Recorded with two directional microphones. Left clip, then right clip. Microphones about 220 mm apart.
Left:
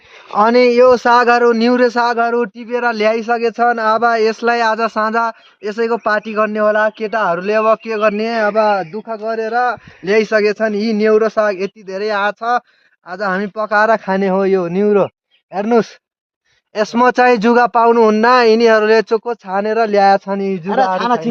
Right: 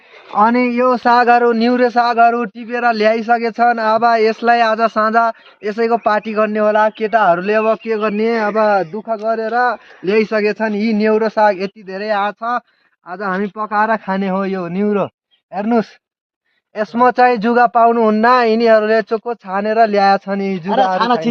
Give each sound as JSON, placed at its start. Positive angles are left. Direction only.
{"t": 0.3, "sound": "speech", "side_deg": 55}
{"t": 9.0, "sound": "speech", "side_deg": 5}
{"t": 10.1, "sound": "speech", "side_deg": 45}
{"t": 11.9, "sound": "speech", "side_deg": 45}